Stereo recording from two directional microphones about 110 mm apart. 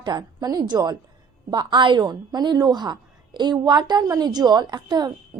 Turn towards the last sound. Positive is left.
turn(degrees=-40)  # may be behind; listen again after turning